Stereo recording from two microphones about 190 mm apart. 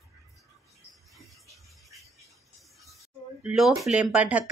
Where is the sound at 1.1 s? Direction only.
Centre (ahead or behind).